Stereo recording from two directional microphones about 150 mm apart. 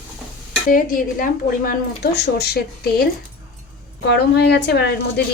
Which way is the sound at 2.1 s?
90° left.